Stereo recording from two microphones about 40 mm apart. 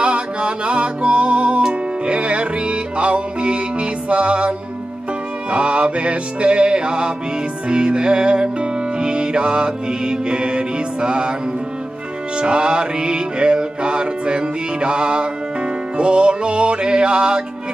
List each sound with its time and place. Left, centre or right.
0.0 s music: right
12.4 s music: right